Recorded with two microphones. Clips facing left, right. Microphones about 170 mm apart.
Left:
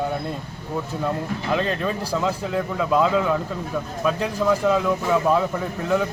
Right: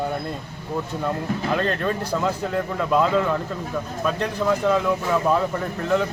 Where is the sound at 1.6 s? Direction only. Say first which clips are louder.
Right 1 dB; 5° left (ahead or behind).